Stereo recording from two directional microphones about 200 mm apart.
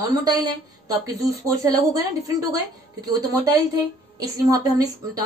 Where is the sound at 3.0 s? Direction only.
20° right (ahead or behind).